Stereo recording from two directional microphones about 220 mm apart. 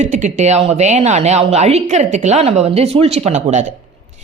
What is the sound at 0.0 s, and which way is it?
A woman's voice, 35° right (ahead or behind).